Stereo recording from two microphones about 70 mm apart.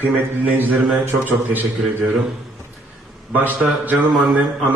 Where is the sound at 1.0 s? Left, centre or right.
Right.